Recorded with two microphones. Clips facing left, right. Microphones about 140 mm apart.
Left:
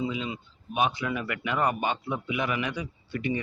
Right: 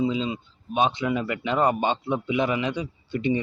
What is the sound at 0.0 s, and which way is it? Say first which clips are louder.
Speech: right 6 dB; 25° right (ahead or behind).